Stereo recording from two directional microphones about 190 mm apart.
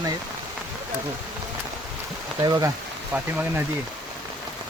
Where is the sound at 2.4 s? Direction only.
20° right (ahead or behind).